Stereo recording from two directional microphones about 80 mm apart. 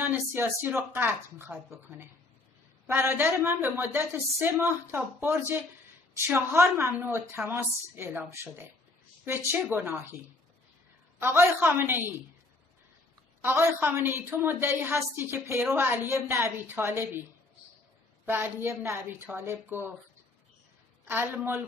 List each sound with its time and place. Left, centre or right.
0.0 s a woman's voice: right
2.9 s a woman's voice: right
13.4 s a woman's voice: right
21.1 s a woman's voice: right